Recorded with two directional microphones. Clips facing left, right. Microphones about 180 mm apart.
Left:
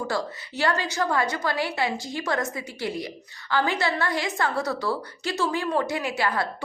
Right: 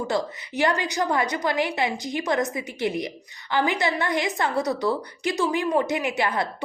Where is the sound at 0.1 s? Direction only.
15° right (ahead or behind).